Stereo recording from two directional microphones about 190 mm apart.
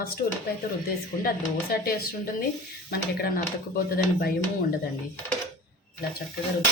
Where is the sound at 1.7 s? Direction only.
50° left (ahead or behind).